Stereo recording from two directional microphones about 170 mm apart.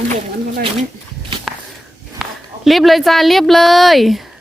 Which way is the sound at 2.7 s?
Centre (ahead or behind).